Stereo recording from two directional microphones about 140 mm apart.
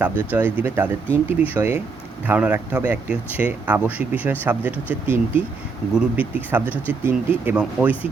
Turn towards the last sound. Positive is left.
turn(degrees=-10)  # may be behind; listen again after turning